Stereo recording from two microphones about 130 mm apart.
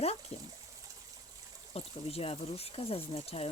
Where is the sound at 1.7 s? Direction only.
50° left (ahead or behind).